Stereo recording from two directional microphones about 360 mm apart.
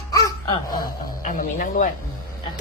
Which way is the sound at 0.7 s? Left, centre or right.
Left.